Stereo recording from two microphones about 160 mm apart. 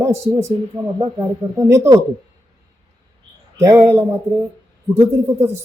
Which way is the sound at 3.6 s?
20° right (ahead or behind).